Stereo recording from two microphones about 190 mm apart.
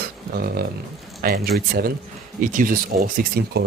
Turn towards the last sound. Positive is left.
turn(degrees=-55)  # may be behind; listen again after turning